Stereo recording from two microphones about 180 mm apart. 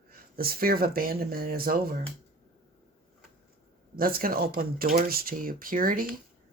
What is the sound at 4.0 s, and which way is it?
Speech, 55° right (ahead or behind).